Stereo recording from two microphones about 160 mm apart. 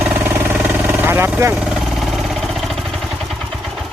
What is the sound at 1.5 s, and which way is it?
Vehicle, 5° right (ahead or behind).